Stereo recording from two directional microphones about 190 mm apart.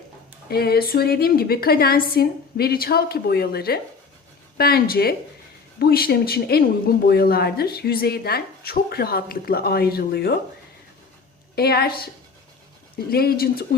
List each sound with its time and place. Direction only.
0.5 s speech: 55° left (ahead or behind)
11.5 s speech: 55° left (ahead or behind)
13.1 s speech: 55° left (ahead or behind)